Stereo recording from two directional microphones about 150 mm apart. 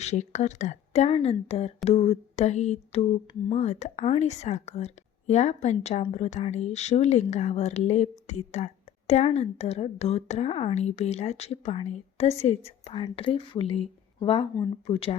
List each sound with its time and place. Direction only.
0.0 s a woman's voice: 50° left (ahead or behind)